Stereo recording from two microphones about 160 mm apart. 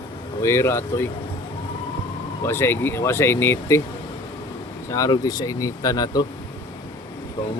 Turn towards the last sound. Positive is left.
turn(degrees=30)  # may be behind; listen again after turning